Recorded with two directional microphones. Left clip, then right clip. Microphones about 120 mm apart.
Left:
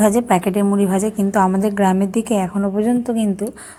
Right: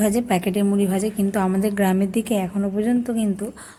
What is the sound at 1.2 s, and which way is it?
A woman's voice, 15° left (ahead or behind).